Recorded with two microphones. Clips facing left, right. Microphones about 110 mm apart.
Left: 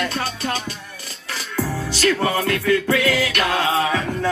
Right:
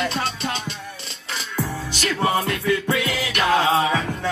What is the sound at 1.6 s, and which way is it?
Music, 15° right (ahead or behind).